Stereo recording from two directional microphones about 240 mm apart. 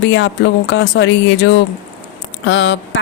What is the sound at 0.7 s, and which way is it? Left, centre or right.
Speech, left.